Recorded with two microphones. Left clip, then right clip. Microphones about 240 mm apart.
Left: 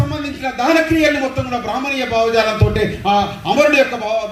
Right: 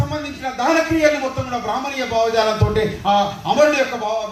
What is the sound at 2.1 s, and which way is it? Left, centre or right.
A man's voice, right.